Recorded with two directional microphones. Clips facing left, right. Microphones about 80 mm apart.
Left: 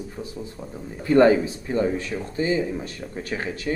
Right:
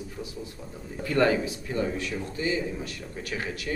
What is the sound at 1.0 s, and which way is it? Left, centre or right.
Speech, left.